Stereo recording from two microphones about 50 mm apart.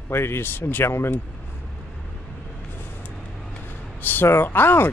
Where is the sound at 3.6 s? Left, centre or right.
Left.